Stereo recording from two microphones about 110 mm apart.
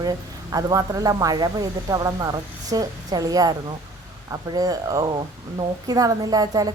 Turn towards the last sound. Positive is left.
turn(degrees=-35)  # may be behind; listen again after turning